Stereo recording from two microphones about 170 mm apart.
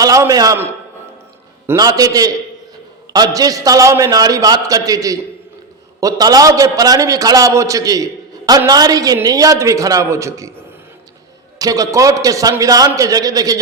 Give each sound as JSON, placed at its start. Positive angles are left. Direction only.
{"t": 0.0, "sound": "a man's voice", "side_deg": -20}
{"t": 11.6, "sound": "a man's voice", "side_deg": -20}